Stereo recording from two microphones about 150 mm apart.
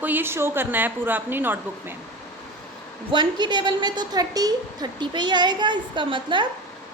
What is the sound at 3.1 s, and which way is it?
A woman's voice, 30° right (ahead or behind).